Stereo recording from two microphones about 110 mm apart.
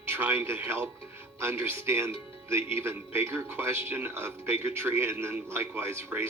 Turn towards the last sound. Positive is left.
turn(degrees=-20)  # may be behind; listen again after turning